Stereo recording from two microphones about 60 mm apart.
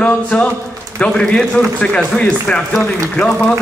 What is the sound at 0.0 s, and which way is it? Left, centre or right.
A man's voice, centre.